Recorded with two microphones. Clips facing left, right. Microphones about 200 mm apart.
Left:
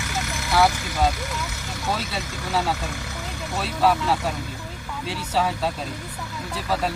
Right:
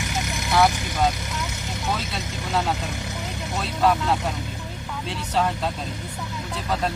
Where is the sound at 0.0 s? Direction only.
20° right (ahead or behind).